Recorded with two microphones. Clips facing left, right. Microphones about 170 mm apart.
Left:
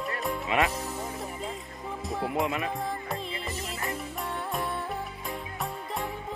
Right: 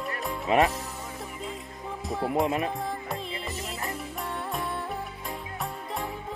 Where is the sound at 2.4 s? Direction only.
40° right (ahead or behind).